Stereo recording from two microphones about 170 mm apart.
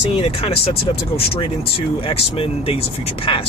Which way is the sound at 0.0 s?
35° left (ahead or behind).